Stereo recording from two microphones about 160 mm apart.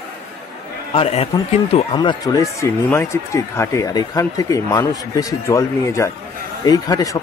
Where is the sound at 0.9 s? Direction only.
40° left (ahead or behind).